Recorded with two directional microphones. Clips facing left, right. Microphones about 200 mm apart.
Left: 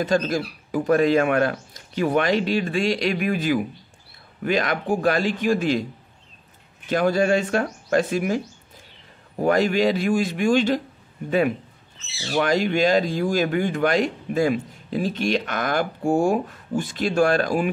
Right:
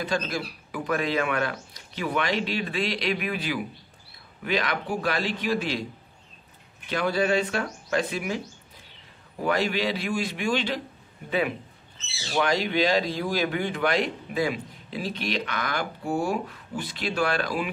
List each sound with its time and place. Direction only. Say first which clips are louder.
0.0 s speech: left 7 dB; 45° left (ahead or behind)
6.9 s speech: left 5 dB; 45° left (ahead or behind)
9.4 s speech: left 6 dB; 45° left (ahead or behind)